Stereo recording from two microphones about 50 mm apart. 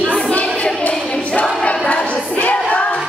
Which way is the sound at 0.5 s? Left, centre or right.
Left.